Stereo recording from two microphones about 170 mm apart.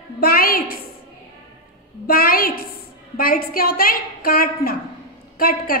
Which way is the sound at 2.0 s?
60° left (ahead or behind).